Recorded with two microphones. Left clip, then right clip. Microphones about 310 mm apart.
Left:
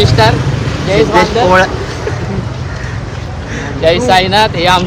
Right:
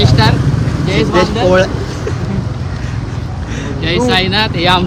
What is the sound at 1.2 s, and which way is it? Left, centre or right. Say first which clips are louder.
Speech: left 3 dB; centre.